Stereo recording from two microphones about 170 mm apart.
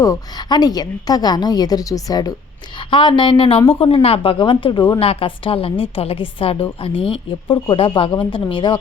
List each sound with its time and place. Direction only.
0.0 s a woman's voice: 20° left (ahead or behind)